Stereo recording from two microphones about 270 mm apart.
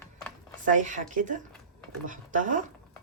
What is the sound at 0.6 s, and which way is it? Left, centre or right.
Speech, right.